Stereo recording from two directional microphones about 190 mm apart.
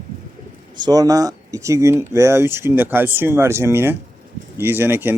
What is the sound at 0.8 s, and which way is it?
Speech, 20° right (ahead or behind).